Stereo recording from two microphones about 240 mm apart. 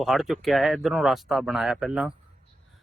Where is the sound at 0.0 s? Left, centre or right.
Centre.